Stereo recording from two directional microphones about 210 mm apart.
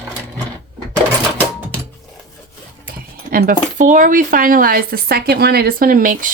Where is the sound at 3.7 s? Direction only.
35° right (ahead or behind).